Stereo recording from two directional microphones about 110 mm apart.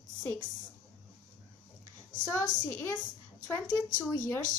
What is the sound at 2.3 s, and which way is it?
Speech, 20° left (ahead or behind).